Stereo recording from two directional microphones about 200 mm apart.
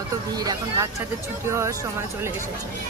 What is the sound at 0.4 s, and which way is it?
Speech, 20° right (ahead or behind).